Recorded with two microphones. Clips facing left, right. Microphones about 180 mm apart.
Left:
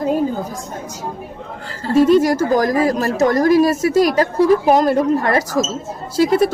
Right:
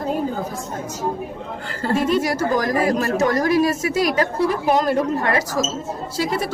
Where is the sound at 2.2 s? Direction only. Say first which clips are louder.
Left 5 dB; 40° left (ahead or behind).